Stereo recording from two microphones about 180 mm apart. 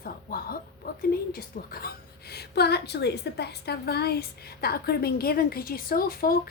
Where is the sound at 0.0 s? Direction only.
55° left (ahead or behind).